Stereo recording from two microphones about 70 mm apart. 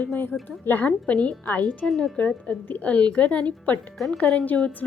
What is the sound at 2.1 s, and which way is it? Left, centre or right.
A woman's voice, centre.